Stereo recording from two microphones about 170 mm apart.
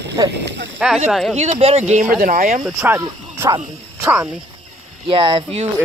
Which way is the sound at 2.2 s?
50° right (ahead or behind).